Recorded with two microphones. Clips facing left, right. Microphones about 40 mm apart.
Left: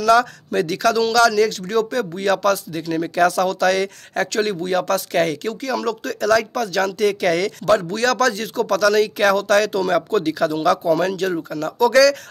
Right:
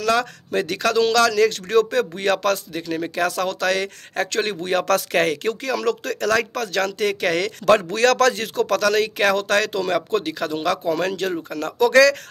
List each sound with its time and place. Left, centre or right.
0.1 s speech: centre
1.1 s speech: right
2.7 s speech: centre
4.3 s speech: right
4.8 s speech: right
5.2 s speech: right
7.0 s speech: right
7.6 s speech: right